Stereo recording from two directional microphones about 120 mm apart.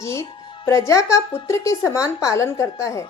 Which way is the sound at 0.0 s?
25° left (ahead or behind).